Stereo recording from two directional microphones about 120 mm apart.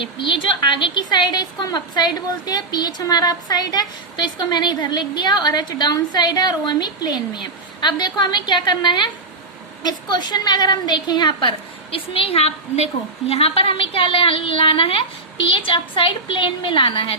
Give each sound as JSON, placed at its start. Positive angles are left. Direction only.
{"t": 0.0, "sound": "a woman's voice", "side_deg": 45}